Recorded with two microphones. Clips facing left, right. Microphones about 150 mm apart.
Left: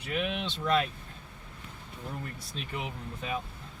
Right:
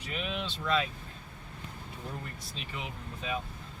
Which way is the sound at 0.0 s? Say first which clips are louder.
Left 4 dB; 55° left (ahead or behind).